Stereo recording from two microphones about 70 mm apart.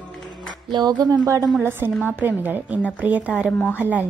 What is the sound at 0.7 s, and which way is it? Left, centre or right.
Speech, right.